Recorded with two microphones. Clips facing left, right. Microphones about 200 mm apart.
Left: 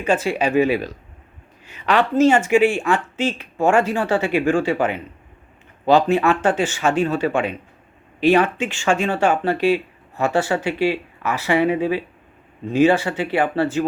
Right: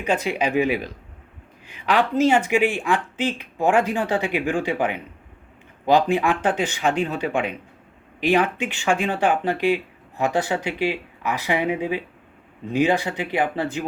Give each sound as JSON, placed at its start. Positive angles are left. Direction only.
{"t": 0.0, "sound": "a woman's voice", "side_deg": -15}